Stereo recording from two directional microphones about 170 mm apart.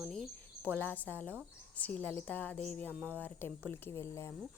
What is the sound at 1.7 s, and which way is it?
A woman's voice, 10° left (ahead or behind).